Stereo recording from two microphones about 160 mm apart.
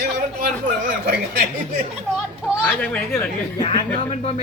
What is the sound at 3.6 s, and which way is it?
Speech, 35° left (ahead or behind).